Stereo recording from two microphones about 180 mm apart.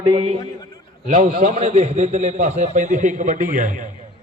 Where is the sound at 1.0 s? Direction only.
45° right (ahead or behind).